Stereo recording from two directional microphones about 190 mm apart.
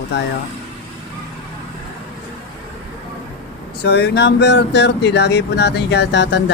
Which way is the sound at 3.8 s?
55° left (ahead or behind).